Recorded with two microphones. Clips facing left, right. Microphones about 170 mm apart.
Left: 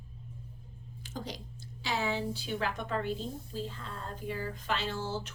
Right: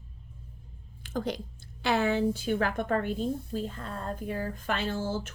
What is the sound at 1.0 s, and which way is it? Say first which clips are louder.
Speech: right 9 dB; 55° right (ahead or behind).